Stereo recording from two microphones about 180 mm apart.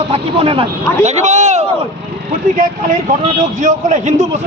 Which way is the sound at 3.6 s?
40° right (ahead or behind).